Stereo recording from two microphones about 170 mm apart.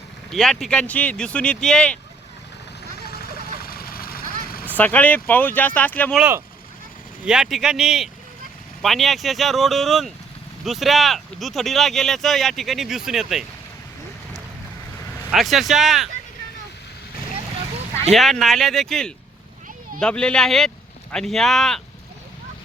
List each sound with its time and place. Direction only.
0.3 s speech: centre (ahead or behind)
3.0 s vehicle: 65° left (ahead or behind)
4.6 s speech: 10° left (ahead or behind)
6.1 s speech: 10° right (ahead or behind)
15.3 s speech: centre (ahead or behind)
18.1 s speech: centre (ahead or behind)